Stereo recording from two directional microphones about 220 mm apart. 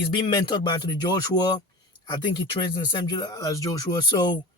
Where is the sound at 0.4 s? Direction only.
20° left (ahead or behind).